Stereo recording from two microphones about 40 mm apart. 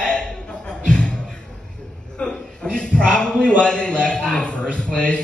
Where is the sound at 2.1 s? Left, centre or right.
Left.